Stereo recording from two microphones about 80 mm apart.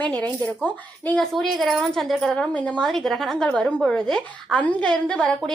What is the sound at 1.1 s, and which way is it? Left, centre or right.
A woman's voice, centre.